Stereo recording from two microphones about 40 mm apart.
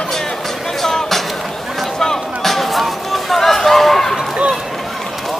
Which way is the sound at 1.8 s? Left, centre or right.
Centre.